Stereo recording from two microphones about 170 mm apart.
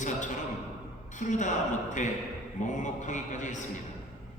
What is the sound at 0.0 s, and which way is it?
A man's voice, 45° left (ahead or behind).